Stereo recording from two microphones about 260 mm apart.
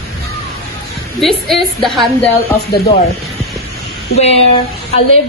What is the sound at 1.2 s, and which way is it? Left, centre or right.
A woman's voice, centre.